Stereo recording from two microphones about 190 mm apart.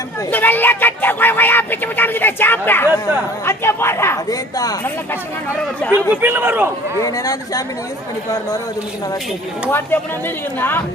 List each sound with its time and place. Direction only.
0.3 s speech: 10° left (ahead or behind)
6.2 s a man's voice: 10° right (ahead or behind)
7.0 s speech: 20° left (ahead or behind)
9.6 s speech: 10° left (ahead or behind)